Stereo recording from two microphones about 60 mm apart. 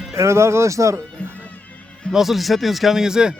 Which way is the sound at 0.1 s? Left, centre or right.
Right.